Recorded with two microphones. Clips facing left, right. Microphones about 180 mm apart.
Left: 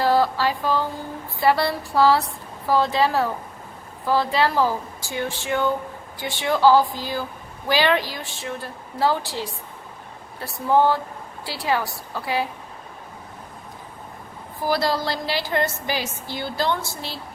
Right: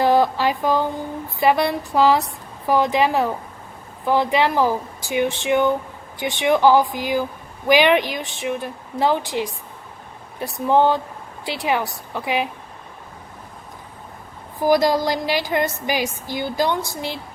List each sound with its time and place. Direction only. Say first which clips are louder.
0.0 s a woman's voice: right 3 dB; 20° right (ahead or behind)
14.6 s a woman's voice: right 6 dB; 15° right (ahead or behind)